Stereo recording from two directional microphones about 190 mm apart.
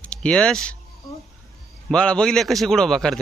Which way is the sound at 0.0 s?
5° left (ahead or behind).